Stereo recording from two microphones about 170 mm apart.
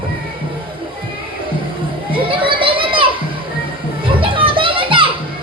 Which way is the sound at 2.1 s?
30° right (ahead or behind).